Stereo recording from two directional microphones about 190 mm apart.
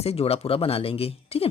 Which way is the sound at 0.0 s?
30° left (ahead or behind).